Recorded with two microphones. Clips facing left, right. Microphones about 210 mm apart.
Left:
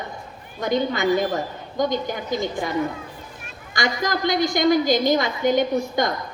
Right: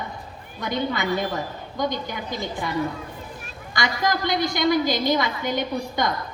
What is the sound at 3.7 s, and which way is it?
A woman's voice, 45° left (ahead or behind).